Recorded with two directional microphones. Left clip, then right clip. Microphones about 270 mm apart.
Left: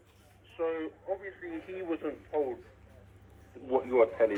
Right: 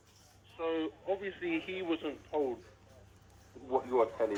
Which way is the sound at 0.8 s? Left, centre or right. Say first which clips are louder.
Right 1 dB; right.